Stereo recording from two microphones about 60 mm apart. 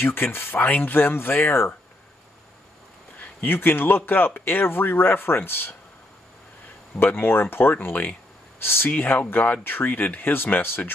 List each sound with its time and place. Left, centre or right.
0.0 s speech: left
3.2 s speech: left
7.0 s speech: left